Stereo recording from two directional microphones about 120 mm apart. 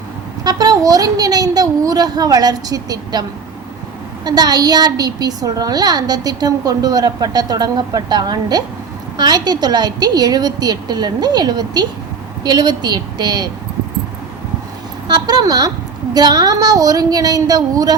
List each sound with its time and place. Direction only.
0.4 s a woman's voice: 35° right (ahead or behind)
15.1 s a woman's voice: 35° right (ahead or behind)